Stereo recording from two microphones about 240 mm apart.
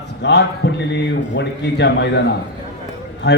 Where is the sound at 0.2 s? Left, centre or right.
Left.